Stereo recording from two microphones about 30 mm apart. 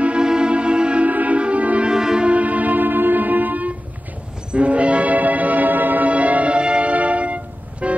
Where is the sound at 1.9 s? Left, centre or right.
Right.